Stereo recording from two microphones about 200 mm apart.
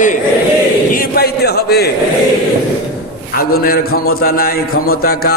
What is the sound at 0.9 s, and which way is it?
Speech, 50° left (ahead or behind).